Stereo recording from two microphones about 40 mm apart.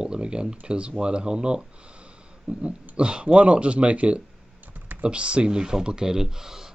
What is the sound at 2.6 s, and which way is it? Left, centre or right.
Speech, right.